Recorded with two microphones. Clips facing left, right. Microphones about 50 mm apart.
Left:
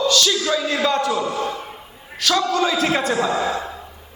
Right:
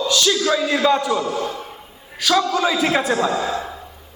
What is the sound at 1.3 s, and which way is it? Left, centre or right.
Speech, left.